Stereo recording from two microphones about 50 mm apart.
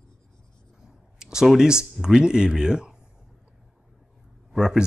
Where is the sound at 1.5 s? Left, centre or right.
Centre.